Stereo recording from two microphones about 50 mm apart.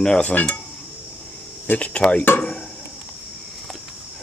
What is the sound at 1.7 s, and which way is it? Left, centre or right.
Speech, left.